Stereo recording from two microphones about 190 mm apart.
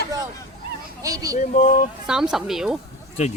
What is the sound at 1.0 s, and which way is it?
Speech, 20° right (ahead or behind).